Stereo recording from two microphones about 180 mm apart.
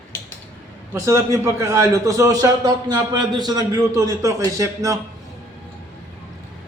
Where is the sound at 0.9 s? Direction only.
15° right (ahead or behind).